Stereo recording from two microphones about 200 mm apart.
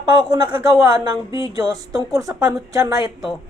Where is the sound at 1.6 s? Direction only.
15° right (ahead or behind).